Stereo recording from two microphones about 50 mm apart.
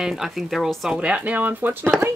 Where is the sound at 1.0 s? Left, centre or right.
Right.